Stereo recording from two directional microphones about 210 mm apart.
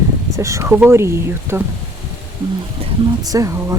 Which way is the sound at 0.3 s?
15° right (ahead or behind).